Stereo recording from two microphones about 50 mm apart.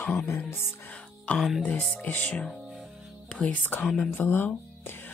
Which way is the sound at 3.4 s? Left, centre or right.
Left.